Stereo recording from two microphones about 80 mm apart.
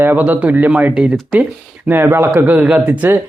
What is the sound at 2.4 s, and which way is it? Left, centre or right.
Speech, centre.